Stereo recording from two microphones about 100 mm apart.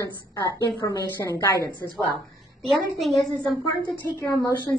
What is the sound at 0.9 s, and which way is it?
Speech, 35° left (ahead or behind).